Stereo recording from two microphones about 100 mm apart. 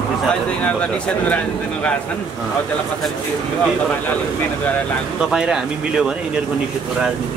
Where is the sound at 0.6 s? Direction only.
15° left (ahead or behind).